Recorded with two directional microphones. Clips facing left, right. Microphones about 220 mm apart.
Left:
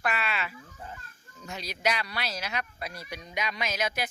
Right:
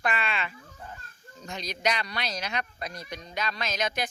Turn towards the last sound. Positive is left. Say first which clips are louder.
# right 1 dB
turn(degrees=5)  # may be behind; listen again after turning